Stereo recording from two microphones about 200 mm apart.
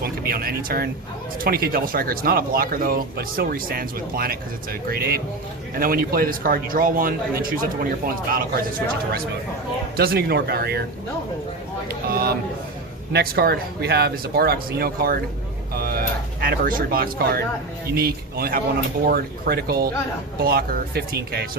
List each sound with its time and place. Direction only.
0.0 s speech: 50° right (ahead or behind)
10.0 s speech: 50° right (ahead or behind)
12.0 s speech: 50° right (ahead or behind)